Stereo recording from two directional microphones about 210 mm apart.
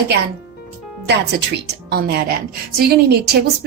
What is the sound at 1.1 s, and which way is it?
A woman's voice, 55° right (ahead or behind).